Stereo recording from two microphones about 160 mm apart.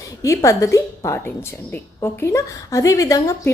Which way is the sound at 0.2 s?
20° left (ahead or behind).